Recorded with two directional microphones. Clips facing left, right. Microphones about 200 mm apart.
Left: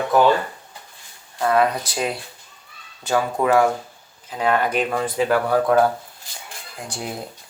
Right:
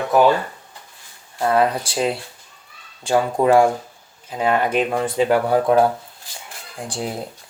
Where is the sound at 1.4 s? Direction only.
30° right (ahead or behind).